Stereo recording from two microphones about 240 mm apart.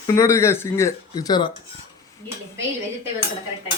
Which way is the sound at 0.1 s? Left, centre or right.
Centre.